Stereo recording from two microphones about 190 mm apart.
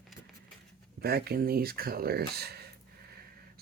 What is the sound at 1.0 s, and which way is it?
Speech, 55° right (ahead or behind).